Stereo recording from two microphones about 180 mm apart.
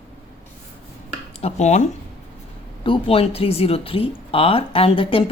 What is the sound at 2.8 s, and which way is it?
Speech, 30° left (ahead or behind).